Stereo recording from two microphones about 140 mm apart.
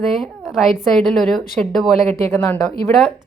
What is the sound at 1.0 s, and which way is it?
Speech, 5° left (ahead or behind).